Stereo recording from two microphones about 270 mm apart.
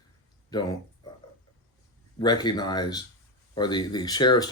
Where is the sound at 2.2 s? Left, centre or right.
Centre.